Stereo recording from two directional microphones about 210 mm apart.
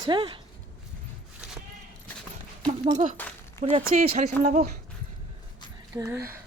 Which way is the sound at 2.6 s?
20° right (ahead or behind).